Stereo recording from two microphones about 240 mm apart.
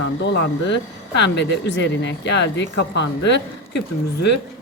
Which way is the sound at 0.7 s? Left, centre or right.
Left.